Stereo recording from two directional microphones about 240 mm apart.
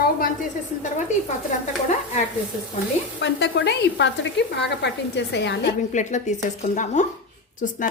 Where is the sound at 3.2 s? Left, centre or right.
Left.